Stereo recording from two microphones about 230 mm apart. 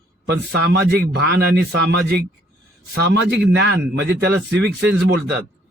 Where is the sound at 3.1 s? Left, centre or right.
Right.